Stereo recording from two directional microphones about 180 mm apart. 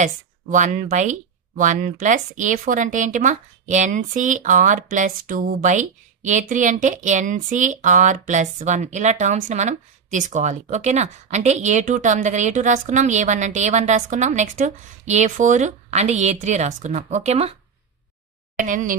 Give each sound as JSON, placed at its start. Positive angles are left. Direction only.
{"t": 0.0, "sound": "speech", "side_deg": -45}
{"t": 18.6, "sound": "speech", "side_deg": -45}